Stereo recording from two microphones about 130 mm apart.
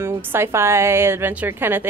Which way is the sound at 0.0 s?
15° right (ahead or behind).